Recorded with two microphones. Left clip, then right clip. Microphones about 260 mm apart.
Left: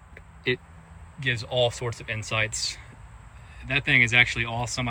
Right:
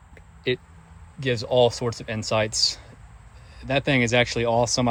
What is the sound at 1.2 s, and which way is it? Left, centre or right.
Speech, centre.